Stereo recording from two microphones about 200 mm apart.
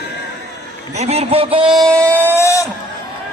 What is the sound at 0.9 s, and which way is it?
Speech, 30° right (ahead or behind).